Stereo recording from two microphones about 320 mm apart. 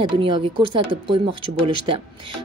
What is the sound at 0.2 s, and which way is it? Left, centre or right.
A woman's voice, centre.